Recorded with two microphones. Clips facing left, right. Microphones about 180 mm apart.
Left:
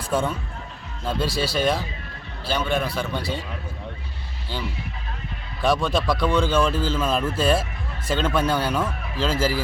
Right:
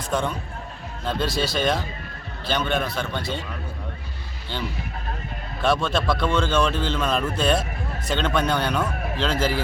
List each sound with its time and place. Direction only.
0.1 s a man's voice: 5° left (ahead or behind)
5.6 s a man's voice: 10° left (ahead or behind)